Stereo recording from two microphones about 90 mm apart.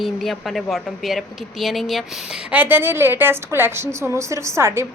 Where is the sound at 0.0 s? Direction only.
Centre (ahead or behind).